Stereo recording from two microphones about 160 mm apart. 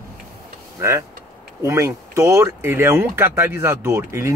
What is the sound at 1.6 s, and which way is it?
Speech, 15° right (ahead or behind).